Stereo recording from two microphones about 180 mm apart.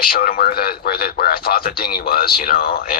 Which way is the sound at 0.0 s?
55° left (ahead or behind).